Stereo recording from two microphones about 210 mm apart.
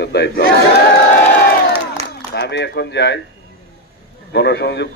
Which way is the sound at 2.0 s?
30° right (ahead or behind).